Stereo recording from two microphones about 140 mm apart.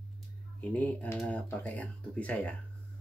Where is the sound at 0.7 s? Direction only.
10° left (ahead or behind).